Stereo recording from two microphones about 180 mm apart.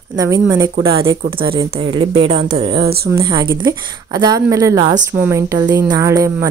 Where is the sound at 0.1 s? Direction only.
20° right (ahead or behind).